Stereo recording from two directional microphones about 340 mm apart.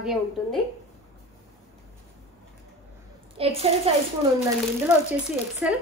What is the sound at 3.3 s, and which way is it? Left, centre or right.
Speech, centre.